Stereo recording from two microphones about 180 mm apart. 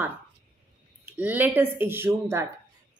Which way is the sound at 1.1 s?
10° right (ahead or behind).